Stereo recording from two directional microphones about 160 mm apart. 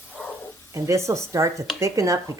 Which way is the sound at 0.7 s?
20° right (ahead or behind).